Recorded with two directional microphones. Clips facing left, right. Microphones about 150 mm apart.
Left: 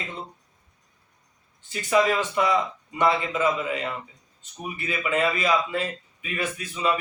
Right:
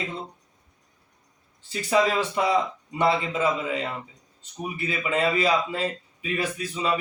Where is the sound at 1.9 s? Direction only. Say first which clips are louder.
Left 1 dB; 30° right (ahead or behind).